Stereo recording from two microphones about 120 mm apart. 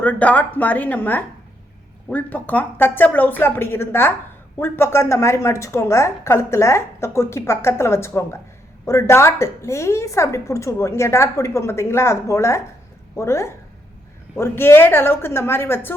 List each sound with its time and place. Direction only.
0.0 s a woman's voice: 15° left (ahead or behind)